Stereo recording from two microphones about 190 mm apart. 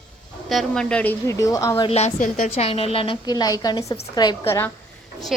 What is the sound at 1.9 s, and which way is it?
A woman's voice, 35° left (ahead or behind).